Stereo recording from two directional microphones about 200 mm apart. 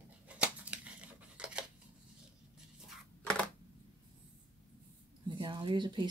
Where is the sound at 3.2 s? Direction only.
5° left (ahead or behind).